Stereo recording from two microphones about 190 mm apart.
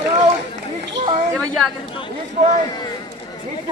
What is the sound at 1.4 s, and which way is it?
Speech, centre (ahead or behind).